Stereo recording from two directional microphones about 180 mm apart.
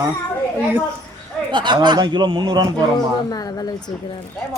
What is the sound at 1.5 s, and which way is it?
A man's voice, 25° right (ahead or behind).